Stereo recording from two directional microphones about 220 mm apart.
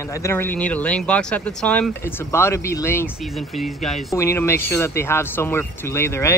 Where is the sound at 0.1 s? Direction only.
10° left (ahead or behind).